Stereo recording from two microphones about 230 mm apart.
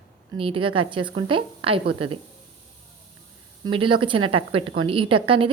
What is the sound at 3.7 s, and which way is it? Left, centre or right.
A woman's voice, right.